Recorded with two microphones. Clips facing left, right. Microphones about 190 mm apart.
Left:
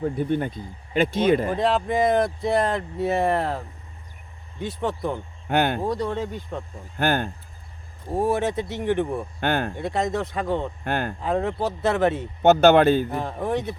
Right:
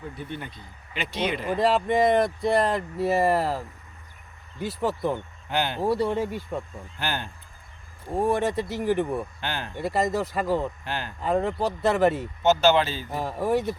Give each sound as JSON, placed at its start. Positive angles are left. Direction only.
{"t": 0.0, "sound": "speech", "side_deg": 50}
{"t": 1.5, "sound": "speech", "side_deg": 0}
{"t": 5.5, "sound": "speech", "side_deg": 55}
{"t": 5.8, "sound": "speech", "side_deg": -10}
{"t": 6.9, "sound": "speech", "side_deg": 50}
{"t": 8.0, "sound": "speech", "side_deg": 0}
{"t": 9.4, "sound": "speech", "side_deg": 55}
{"t": 9.7, "sound": "speech", "side_deg": 0}
{"t": 10.8, "sound": "speech", "side_deg": 55}
{"t": 11.2, "sound": "speech", "side_deg": 0}
{"t": 12.4, "sound": "speech", "side_deg": 60}
{"t": 13.1, "sound": "speech", "side_deg": -5}